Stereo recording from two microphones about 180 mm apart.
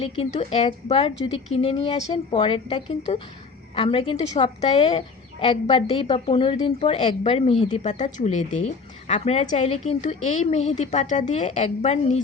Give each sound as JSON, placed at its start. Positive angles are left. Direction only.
{"t": 0.0, "sound": "a woman's voice", "side_deg": 30}